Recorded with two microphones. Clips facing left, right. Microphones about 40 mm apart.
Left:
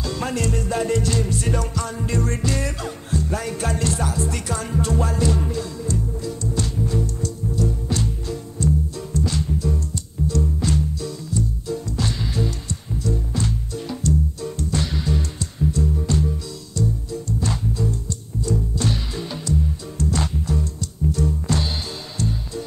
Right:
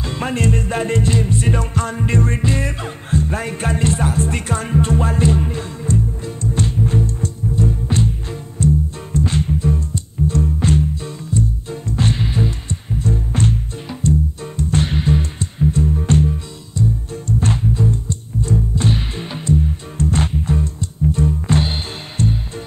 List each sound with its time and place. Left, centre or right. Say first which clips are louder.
0.0 s music: right 4 dB; right
13.8 s music: right 4 dB; right
16.8 s music: right 4 dB; right
17.1 s music: right 5 dB; right